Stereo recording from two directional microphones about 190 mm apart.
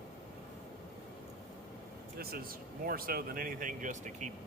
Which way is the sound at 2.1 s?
50° right (ahead or behind).